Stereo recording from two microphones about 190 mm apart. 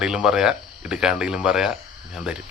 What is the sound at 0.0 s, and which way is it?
Speech, 5° right (ahead or behind).